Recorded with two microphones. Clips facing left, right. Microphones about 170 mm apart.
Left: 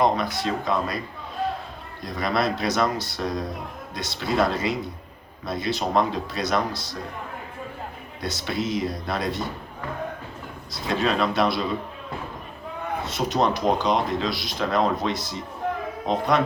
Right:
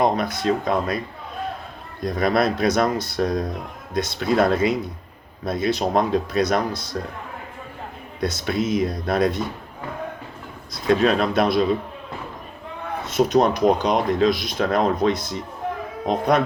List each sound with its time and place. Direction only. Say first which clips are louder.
0.0 s speech: right 2 dB; 50° right (ahead or behind)
2.0 s speech: right 5 dB; 50° right (ahead or behind)
8.2 s speech: right 5 dB; 50° right (ahead or behind)
10.8 s speech: right 5 dB; 50° right (ahead or behind)
13.1 s speech: right 6 dB; 50° right (ahead or behind)